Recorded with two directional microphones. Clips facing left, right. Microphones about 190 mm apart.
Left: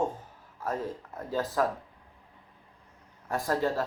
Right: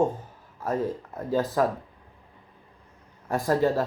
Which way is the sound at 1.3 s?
15° right (ahead or behind).